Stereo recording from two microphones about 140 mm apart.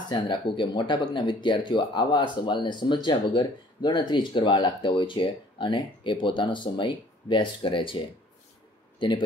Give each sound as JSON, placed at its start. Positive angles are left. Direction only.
{"t": 0.1, "sound": "speech", "side_deg": 35}
{"t": 9.0, "sound": "speech", "side_deg": 35}